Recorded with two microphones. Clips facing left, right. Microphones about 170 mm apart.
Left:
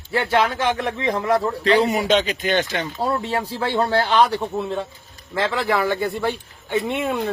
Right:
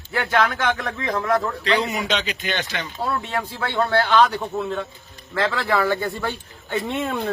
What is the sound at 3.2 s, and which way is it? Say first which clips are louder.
A man's voice: left 3 dB; 30° left (ahead or behind).